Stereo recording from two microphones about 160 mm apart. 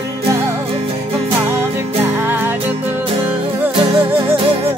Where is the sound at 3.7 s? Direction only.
35° right (ahead or behind).